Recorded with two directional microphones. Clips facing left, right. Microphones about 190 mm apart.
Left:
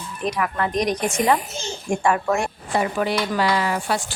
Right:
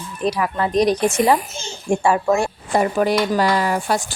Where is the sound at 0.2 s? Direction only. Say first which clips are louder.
Right 3 dB; 30° right (ahead or behind).